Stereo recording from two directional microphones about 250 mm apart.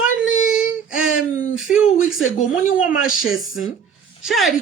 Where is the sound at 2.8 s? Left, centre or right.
Centre.